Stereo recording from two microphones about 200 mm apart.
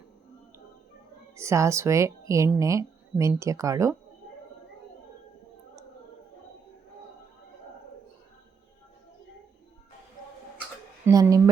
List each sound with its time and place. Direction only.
1.4 s a woman's voice: 15° right (ahead or behind)
11.0 s speech: 15° right (ahead or behind)